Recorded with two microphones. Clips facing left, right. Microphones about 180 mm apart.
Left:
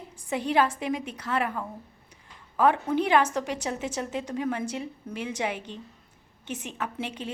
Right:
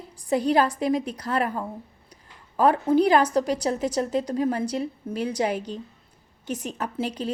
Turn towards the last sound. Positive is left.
turn(degrees=-40)  # may be behind; listen again after turning